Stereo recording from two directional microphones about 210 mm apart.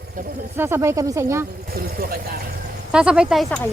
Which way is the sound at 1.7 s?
45° right (ahead or behind).